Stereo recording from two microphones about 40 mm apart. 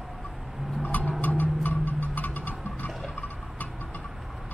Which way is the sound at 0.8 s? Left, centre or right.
Left.